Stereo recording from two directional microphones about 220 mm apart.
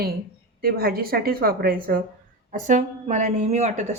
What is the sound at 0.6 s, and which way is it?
A woman's voice, 45° right (ahead or behind).